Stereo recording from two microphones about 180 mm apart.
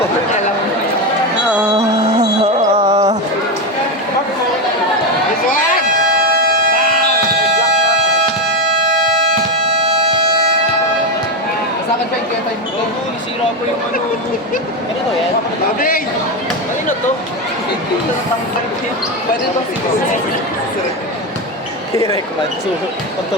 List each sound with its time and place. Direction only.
1.7 s music: 40° right (ahead or behind)
9.6 s music: 35° right (ahead or behind)
21.9 s speech: 20° left (ahead or behind)